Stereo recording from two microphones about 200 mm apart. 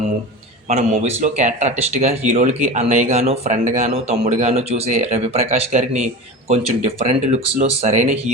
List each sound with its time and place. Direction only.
0.7 s speech: 35° right (ahead or behind)